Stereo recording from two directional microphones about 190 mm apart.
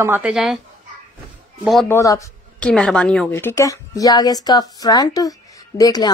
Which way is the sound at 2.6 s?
5° left (ahead or behind).